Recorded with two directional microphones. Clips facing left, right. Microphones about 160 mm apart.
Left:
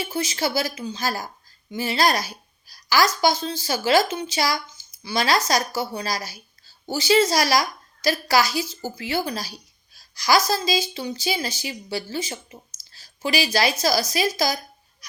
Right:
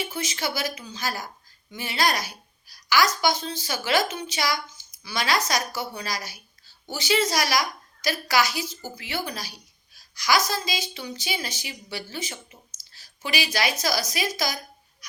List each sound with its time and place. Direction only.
0.1 s a woman's voice: 30° left (ahead or behind)